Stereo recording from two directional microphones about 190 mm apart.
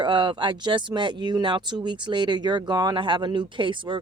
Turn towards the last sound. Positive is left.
turn(degrees=-25)  # may be behind; listen again after turning